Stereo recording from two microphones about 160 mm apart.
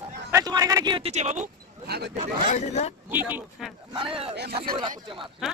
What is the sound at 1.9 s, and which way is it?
Speech, 90° right.